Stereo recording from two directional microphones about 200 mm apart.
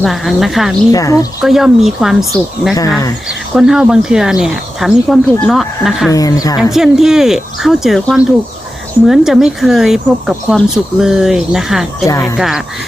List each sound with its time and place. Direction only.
0.0 s speech: centre (ahead or behind)
0.9 s speech: 15° left (ahead or behind)
1.4 s speech: centre (ahead or behind)
6.1 s speech: 15° left (ahead or behind)
6.6 s speech: centre (ahead or behind)